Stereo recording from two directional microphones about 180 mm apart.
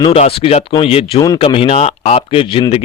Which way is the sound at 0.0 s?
35° left (ahead or behind).